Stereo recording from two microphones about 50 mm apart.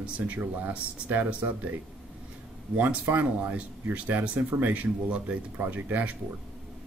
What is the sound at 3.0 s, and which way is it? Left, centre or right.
Speech, right.